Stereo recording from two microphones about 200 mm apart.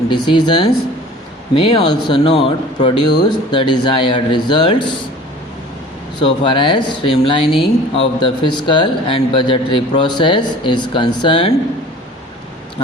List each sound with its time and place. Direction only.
0.1 s speech: 25° left (ahead or behind)
6.1 s speech: 25° left (ahead or behind)